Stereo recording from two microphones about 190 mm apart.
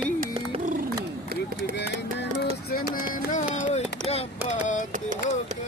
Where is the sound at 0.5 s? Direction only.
40° right (ahead or behind).